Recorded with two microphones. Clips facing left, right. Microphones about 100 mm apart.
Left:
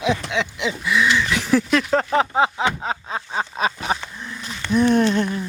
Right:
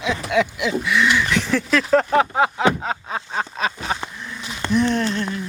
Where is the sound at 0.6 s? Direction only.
Centre (ahead or behind).